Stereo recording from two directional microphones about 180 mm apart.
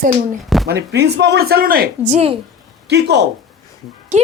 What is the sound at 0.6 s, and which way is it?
Speech, 65° right (ahead or behind).